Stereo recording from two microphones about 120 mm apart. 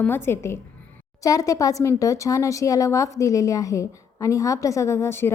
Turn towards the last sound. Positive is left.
turn(degrees=20)  # may be behind; listen again after turning